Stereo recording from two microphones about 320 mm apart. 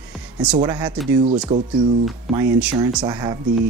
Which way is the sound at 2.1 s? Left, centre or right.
Centre.